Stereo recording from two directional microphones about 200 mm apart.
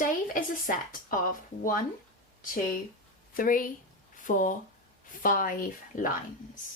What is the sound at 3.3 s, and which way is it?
A woman's voice, 45° left (ahead or behind).